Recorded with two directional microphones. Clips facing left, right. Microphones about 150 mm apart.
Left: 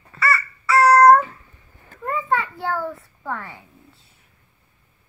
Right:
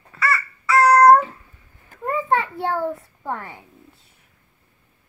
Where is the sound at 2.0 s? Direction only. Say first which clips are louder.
Right 2 dB; 20° right (ahead or behind).